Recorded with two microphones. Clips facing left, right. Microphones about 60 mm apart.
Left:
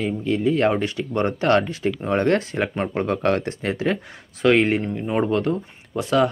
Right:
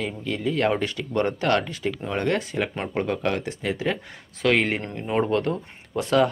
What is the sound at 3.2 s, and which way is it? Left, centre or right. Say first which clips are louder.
Speech: left 4 dB; left.